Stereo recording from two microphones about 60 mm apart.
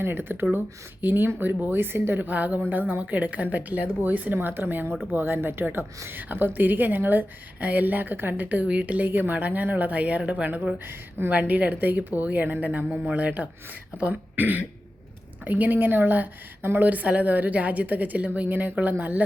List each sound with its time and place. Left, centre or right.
0.0 s speech: right